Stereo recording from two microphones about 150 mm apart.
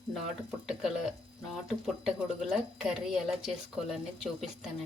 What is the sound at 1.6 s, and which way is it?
Speech, centre (ahead or behind).